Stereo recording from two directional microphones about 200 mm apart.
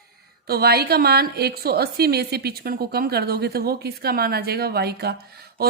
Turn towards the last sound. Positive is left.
turn(degrees=-50)  # may be behind; listen again after turning